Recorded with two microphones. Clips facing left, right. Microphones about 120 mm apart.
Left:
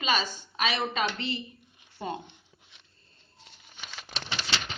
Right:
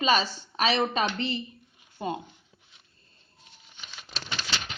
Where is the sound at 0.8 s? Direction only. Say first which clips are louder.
Right 3 dB; 25° right (ahead or behind).